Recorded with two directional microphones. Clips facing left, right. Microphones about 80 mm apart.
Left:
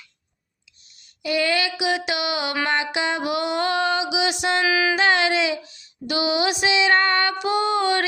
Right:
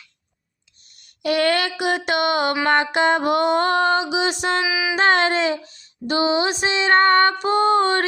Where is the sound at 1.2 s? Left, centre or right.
Right.